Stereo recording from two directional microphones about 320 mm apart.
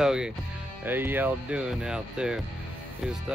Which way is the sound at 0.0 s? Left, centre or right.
Centre.